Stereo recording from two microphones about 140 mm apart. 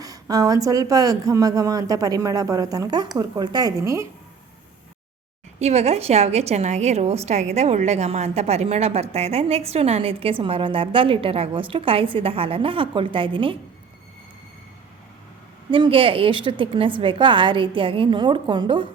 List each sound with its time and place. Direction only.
0.0 s a woman's voice: 25° right (ahead or behind)
5.5 s a woman's voice: 50° right (ahead or behind)
15.7 s a woman's voice: 40° right (ahead or behind)